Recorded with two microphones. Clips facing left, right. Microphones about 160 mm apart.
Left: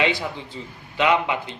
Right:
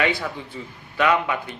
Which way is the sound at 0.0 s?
25° left (ahead or behind).